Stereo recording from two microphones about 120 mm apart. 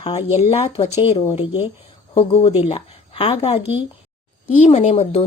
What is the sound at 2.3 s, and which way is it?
A woman's voice, 55° left (ahead or behind).